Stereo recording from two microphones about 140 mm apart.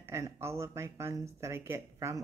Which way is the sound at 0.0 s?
20° right (ahead or behind).